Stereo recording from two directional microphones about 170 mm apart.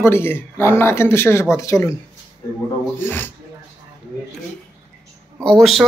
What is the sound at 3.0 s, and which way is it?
Speech, 10° left (ahead or behind).